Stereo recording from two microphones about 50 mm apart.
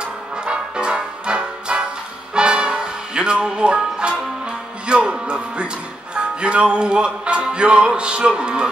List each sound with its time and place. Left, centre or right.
0.0 s music: centre